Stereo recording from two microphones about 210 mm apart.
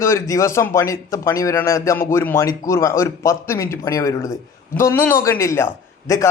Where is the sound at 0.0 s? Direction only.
15° left (ahead or behind).